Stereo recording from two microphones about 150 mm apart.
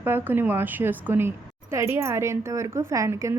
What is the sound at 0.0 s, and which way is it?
A woman's voice, 15° right (ahead or behind).